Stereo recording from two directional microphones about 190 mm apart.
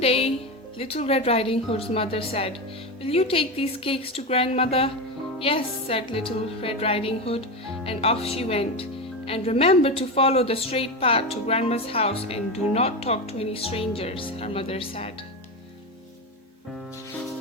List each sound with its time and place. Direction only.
0.0 s music: 30° left (ahead or behind)
0.8 s a woman's voice: 30° left (ahead or behind)
3.0 s music: 30° left (ahead or behind)
7.9 s a woman's voice: 30° left (ahead or behind)